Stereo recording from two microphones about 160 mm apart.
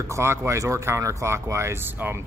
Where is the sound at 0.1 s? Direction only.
15° right (ahead or behind).